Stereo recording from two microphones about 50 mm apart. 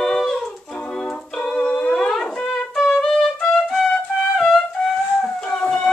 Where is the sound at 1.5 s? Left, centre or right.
Left.